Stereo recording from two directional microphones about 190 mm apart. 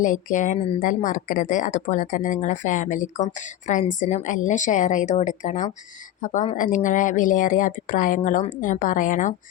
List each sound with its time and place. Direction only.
0.0 s a woman's voice: 40° left (ahead or behind)